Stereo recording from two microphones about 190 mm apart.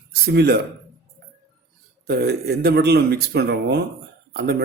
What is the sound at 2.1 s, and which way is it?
A man's voice, 55° right (ahead or behind).